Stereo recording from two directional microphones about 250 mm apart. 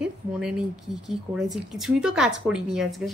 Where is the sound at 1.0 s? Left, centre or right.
Centre.